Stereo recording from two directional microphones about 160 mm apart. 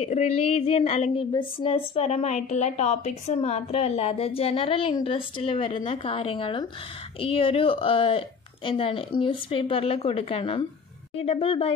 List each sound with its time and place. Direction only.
0.0 s a woman's voice: 40° left (ahead or behind)